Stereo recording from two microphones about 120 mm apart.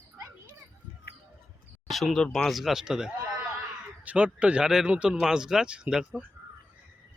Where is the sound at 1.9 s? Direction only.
Centre (ahead or behind).